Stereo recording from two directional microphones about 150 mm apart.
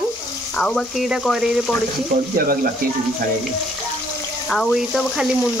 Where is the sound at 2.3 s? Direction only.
70° right (ahead or behind).